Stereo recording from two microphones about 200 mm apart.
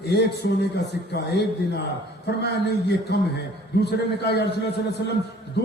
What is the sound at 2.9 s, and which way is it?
A man's voice, 55° left (ahead or behind).